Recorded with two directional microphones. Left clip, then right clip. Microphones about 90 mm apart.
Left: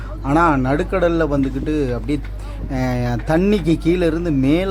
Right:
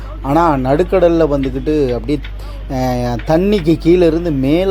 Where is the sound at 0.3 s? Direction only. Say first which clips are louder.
Right 4 dB; 25° right (ahead or behind).